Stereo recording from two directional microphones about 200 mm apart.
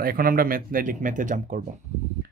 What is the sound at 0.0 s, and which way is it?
Speech, 45° right (ahead or behind).